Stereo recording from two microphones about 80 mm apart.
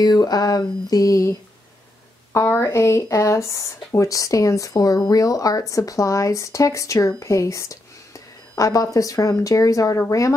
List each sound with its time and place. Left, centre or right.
0.0 s speech: left
2.3 s speech: left